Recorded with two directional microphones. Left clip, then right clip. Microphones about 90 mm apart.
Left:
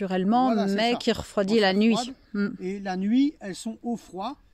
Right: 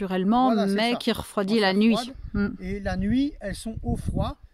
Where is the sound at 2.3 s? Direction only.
35° right (ahead or behind).